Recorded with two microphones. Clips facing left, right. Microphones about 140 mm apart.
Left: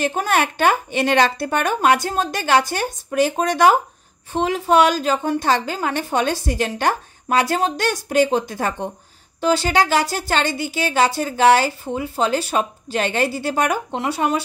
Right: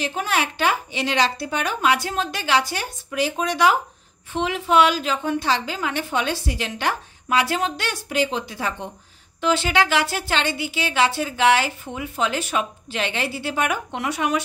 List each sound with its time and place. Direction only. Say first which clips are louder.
0.0 s a woman's voice: left 5 dB; 50° left (ahead or behind)
9.4 s speech: left 3 dB; 35° left (ahead or behind)